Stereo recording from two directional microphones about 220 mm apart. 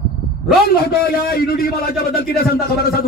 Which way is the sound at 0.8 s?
45° left (ahead or behind).